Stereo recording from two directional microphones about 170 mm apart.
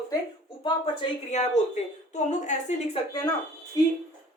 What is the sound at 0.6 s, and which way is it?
Speech, 30° left (ahead or behind).